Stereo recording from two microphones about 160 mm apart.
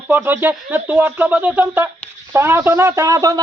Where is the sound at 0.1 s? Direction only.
10° right (ahead or behind).